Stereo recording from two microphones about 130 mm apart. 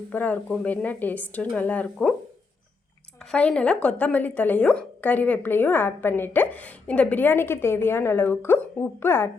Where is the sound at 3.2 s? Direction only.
5° left (ahead or behind).